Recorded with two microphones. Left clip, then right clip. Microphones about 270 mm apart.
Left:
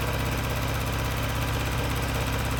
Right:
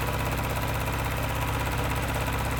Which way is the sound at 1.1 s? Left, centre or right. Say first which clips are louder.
Even; centre.